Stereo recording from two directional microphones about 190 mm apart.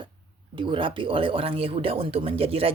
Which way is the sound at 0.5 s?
25° right (ahead or behind).